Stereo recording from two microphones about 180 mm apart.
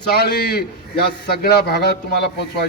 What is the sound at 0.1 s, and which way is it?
A man's voice, 60° left (ahead or behind).